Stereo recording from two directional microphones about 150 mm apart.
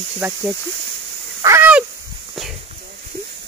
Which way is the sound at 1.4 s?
20° right (ahead or behind).